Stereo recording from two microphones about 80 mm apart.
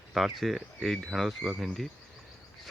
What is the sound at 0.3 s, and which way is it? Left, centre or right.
Speech, centre.